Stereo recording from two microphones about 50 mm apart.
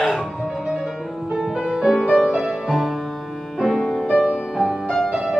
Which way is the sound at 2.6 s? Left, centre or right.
Centre.